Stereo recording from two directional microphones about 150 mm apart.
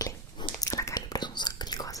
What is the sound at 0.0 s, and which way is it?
Whispering, 25° left (ahead or behind).